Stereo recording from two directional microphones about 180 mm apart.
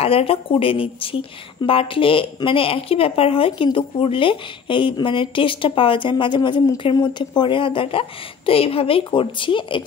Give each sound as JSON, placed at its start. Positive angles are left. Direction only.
{"t": 0.0, "sound": "speech", "side_deg": 30}